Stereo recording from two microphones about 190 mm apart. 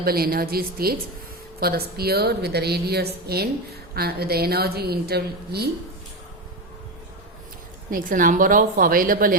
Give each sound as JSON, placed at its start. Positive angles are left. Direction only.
{"t": 0.0, "sound": "a woman's voice", "side_deg": -55}
{"t": 7.9, "sound": "a woman's voice", "side_deg": -45}